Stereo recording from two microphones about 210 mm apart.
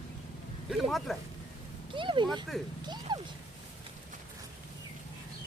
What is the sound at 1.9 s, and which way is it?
Speech, 25° right (ahead or behind).